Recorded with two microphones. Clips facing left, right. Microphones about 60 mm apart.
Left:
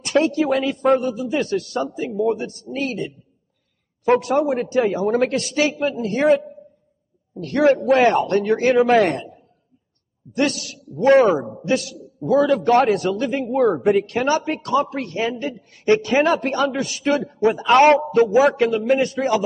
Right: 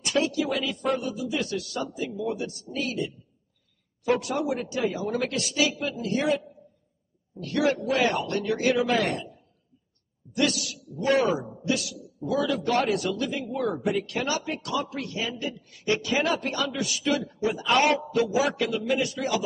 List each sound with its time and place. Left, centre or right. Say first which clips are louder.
0.0 s a man's voice: left 7 dB; left
7.3 s a man's voice: left 8 dB; left